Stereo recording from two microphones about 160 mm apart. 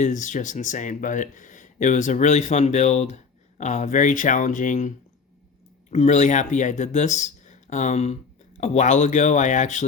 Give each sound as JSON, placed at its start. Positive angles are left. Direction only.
{"t": 0.0, "sound": "speech", "side_deg": 50}
{"t": 5.9, "sound": "speech", "side_deg": 45}